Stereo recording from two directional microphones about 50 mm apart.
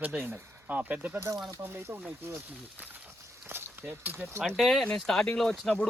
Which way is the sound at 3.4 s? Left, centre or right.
Right.